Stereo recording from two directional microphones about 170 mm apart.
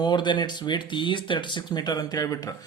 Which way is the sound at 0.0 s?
25° left (ahead or behind).